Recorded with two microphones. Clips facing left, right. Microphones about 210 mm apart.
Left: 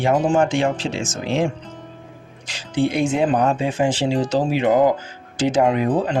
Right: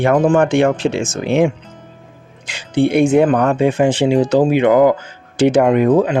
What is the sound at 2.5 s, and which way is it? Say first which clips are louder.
Speech: right 6 dB; 60° right (ahead or behind).